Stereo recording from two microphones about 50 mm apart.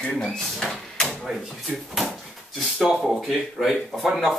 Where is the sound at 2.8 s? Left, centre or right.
Centre.